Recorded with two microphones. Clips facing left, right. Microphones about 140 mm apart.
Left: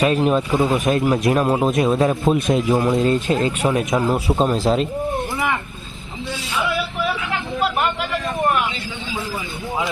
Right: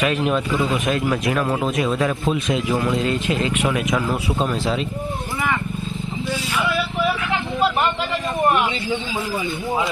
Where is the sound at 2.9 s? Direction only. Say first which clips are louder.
Left 3 dB; 45° left (ahead or behind).